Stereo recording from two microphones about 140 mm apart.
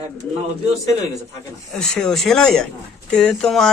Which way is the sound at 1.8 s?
5° left (ahead or behind).